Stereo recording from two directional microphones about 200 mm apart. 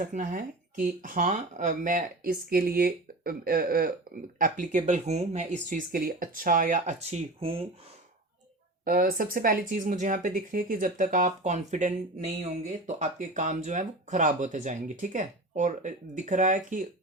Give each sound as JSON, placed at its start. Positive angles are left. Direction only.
{"t": 0.0, "sound": "speech", "side_deg": -40}
{"t": 8.8, "sound": "speech", "side_deg": -45}